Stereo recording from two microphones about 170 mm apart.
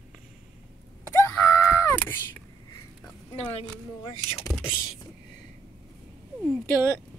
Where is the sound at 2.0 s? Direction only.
5° left (ahead or behind).